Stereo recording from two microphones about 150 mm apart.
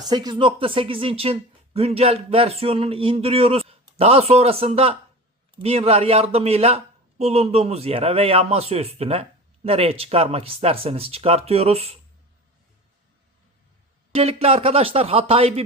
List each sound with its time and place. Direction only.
0.0 s a man's voice: 30° right (ahead or behind)
14.1 s speech: 45° right (ahead or behind)